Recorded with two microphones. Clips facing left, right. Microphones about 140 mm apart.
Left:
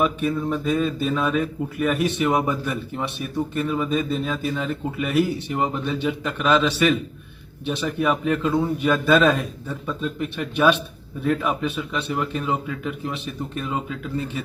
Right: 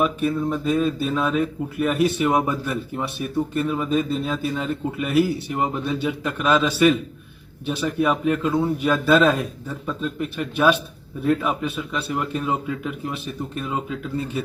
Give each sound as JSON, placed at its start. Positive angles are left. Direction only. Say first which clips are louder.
{"t": 0.0, "sound": "speech", "louder": "right 1 dB", "side_deg": -5}